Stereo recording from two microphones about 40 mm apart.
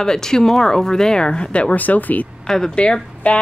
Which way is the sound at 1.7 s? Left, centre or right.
Left.